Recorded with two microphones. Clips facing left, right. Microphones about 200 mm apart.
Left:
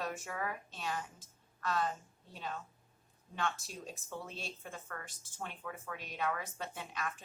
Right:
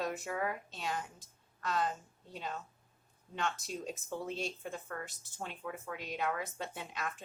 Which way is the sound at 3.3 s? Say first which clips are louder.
Right 1 dB; 20° right (ahead or behind).